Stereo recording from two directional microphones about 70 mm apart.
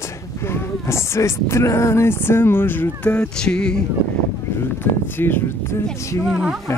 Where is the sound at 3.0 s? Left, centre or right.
Centre.